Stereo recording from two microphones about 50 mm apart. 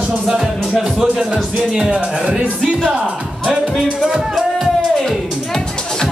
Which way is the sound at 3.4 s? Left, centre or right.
Centre.